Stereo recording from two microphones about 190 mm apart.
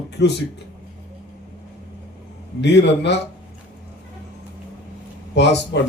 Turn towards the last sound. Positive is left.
turn(degrees=65)  # may be behind; listen again after turning